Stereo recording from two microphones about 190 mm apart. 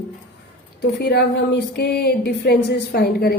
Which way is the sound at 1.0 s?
60° left (ahead or behind).